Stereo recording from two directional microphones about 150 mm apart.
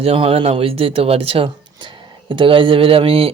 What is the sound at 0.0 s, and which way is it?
Speech, 35° right (ahead or behind).